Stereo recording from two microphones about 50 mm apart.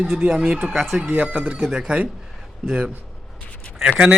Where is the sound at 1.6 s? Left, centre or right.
Centre.